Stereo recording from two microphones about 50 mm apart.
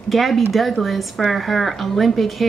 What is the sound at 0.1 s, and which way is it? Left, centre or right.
Speech, centre.